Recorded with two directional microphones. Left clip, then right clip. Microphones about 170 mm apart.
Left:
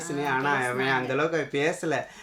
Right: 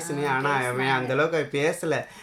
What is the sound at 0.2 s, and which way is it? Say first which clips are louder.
Speech: right 1 dB; 15° right (ahead or behind).